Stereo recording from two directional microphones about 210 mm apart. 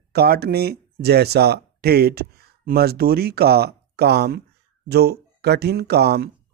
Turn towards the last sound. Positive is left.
turn(degrees=-50)  # may be behind; listen again after turning